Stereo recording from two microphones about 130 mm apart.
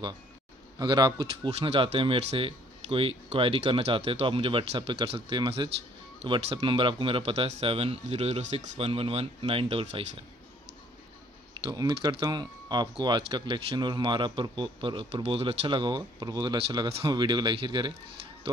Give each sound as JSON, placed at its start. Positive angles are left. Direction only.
{"t": 0.7, "sound": "speech", "side_deg": -35}
{"t": 12.2, "sound": "speech", "side_deg": -35}